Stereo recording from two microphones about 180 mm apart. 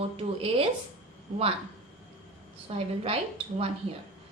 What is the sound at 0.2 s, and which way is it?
Speech, 30° right (ahead or behind).